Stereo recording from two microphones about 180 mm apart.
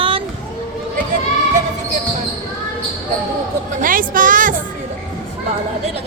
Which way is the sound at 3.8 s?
50° right (ahead or behind).